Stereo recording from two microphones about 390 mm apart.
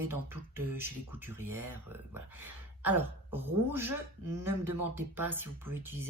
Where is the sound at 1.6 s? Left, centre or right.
Right.